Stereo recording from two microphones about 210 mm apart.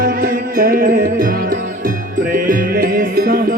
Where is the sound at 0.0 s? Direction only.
45° right (ahead or behind).